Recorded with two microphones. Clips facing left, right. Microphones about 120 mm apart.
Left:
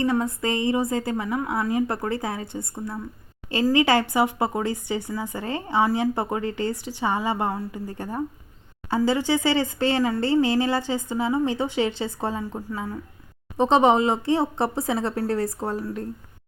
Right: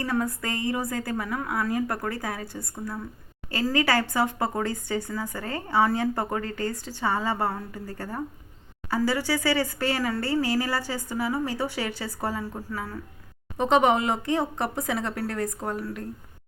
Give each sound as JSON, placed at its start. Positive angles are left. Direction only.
{"t": 0.0, "sound": "speech", "side_deg": 20}
{"t": 13.6, "sound": "speech", "side_deg": 30}